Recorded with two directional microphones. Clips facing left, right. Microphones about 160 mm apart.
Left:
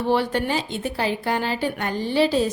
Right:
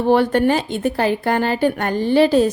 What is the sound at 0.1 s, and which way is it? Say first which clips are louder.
A woman's voice: right 7 dB; 50° right (ahead or behind).